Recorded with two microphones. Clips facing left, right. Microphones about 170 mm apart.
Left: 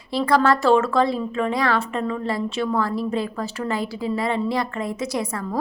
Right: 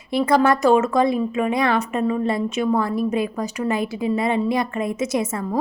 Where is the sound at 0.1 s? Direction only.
20° right (ahead or behind).